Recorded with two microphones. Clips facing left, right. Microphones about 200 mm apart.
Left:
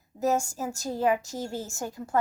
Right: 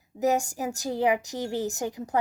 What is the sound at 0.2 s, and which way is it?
A woman's voice, 15° right (ahead or behind).